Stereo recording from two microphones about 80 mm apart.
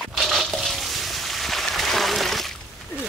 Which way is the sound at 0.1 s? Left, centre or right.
Centre.